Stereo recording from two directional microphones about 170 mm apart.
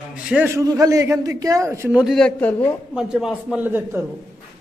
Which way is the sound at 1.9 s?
Centre (ahead or behind).